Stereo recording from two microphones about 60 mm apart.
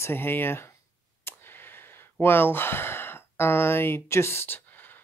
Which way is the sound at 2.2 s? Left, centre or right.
Left.